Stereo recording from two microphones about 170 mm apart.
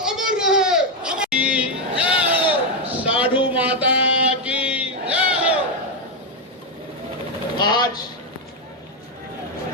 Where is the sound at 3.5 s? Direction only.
10° right (ahead or behind).